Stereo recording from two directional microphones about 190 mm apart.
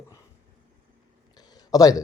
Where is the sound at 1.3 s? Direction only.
20° left (ahead or behind).